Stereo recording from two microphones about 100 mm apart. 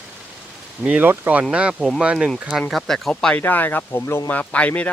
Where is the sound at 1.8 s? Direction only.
Centre (ahead or behind).